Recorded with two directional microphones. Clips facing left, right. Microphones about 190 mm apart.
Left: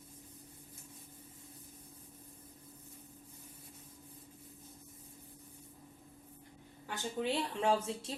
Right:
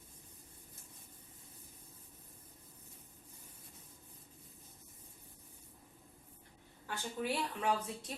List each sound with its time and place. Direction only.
6.8 s speech: 20° left (ahead or behind)